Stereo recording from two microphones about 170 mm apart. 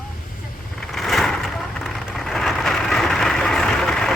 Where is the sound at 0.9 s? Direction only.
Centre (ahead or behind).